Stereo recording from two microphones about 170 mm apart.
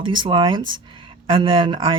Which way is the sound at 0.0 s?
30° right (ahead or behind).